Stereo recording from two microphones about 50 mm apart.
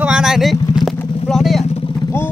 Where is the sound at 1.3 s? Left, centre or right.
Centre.